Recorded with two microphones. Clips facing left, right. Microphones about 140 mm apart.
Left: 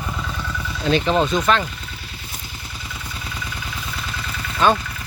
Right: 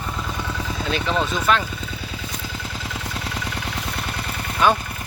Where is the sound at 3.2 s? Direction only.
70° right (ahead or behind).